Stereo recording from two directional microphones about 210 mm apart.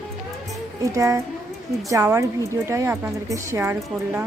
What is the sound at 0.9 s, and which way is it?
A woman's voice, 15° right (ahead or behind).